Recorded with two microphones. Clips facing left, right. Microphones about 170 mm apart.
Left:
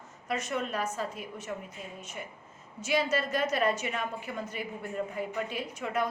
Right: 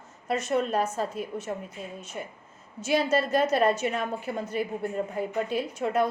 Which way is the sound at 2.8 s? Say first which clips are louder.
Right 4 dB; 30° right (ahead or behind).